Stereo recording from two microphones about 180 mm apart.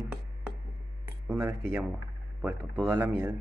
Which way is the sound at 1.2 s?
15° right (ahead or behind).